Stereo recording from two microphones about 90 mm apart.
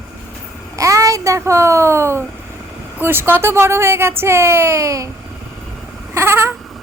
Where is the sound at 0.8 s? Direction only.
35° right (ahead or behind).